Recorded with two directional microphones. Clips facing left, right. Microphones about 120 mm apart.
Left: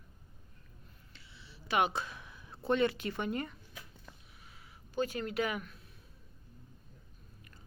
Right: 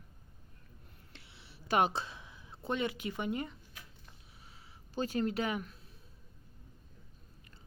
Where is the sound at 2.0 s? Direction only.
20° right (ahead or behind).